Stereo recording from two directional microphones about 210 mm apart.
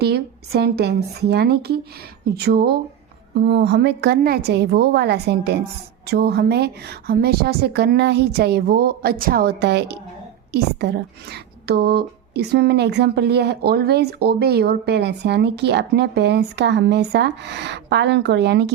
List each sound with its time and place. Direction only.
0.0 s speech: 50° right (ahead or behind)